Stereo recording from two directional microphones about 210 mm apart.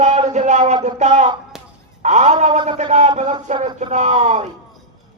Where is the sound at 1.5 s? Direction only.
Centre (ahead or behind).